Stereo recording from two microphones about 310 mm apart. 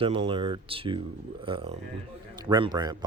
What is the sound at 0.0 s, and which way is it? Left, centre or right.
Speech, centre.